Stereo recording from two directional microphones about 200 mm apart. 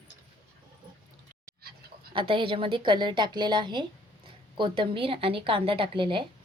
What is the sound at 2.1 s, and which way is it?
A woman's voice, 25° right (ahead or behind).